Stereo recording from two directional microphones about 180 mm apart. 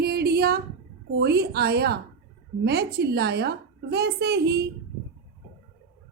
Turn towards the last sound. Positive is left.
turn(degrees=-65)  # may be behind; listen again after turning